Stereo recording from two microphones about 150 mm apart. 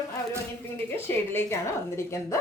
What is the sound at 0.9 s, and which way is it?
Speech, 15° left (ahead or behind).